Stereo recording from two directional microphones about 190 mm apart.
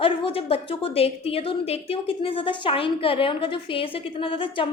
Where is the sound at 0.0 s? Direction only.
30° left (ahead or behind).